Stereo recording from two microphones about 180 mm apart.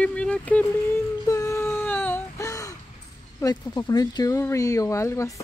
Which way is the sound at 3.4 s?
20° left (ahead or behind).